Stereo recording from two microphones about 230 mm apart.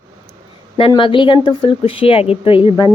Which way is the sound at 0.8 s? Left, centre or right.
Left.